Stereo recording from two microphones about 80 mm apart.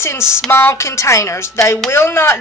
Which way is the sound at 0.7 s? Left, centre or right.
Left.